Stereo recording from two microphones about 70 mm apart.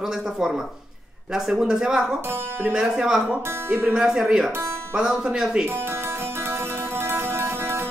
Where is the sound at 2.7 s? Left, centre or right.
Centre.